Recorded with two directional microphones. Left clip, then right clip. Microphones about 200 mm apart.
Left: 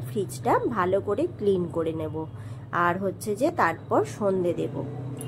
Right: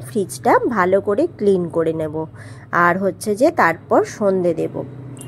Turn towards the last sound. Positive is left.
turn(degrees=-35)  # may be behind; listen again after turning